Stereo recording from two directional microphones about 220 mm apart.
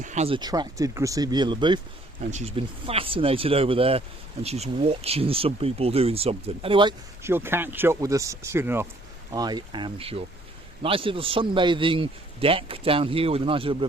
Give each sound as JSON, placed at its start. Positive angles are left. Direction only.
{"t": 0.0, "sound": "speech", "side_deg": -30}